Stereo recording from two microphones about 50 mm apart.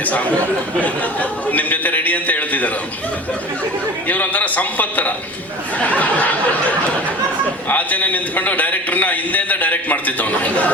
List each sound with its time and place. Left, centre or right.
0.0 s a man's voice: left
4.1 s a man's voice: left